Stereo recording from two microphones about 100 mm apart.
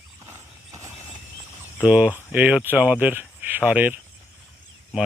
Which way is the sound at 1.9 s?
15° right (ahead or behind).